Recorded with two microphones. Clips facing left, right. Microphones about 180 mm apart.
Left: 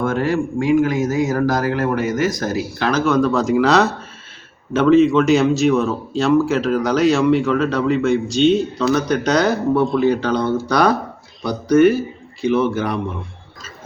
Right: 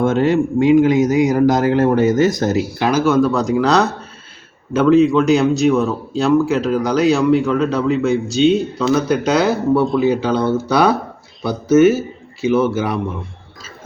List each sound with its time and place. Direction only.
0.0 s a man's voice: 25° right (ahead or behind); by 13.0 s 5° right (ahead or behind)